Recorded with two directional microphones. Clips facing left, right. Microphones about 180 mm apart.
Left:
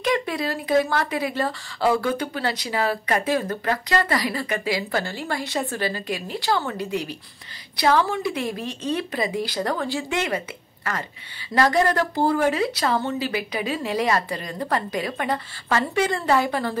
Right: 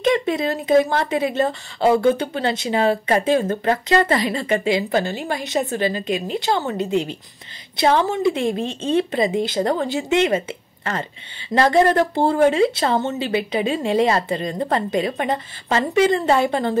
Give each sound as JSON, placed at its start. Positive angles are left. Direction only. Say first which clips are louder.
{"t": 0.0, "sound": "speech", "louder": "right 5 dB", "side_deg": -25}